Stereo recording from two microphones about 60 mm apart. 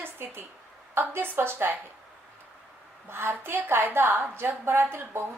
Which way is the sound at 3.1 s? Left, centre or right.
Right.